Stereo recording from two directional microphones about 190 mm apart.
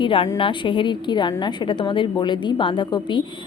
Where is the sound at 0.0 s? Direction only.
25° left (ahead or behind).